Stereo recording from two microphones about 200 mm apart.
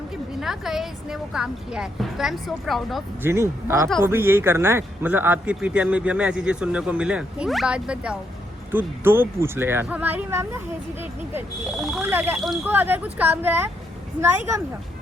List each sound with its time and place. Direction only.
0.3 s a woman's voice: centre (ahead or behind)
3.2 s a man's voice: 15° right (ahead or behind)